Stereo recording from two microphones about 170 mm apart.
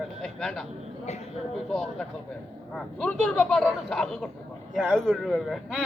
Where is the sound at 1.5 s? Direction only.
Centre (ahead or behind).